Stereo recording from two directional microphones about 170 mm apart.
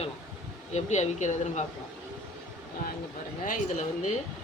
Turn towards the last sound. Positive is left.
turn(degrees=45)  # may be behind; listen again after turning